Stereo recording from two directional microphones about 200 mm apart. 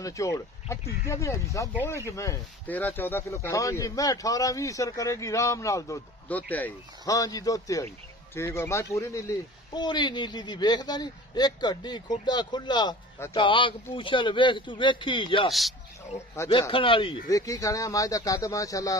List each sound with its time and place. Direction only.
0.0 s speech: 15° left (ahead or behind)
16.6 s speech: 25° left (ahead or behind)